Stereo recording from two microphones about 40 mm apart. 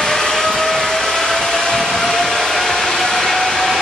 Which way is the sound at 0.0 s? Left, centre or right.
Centre.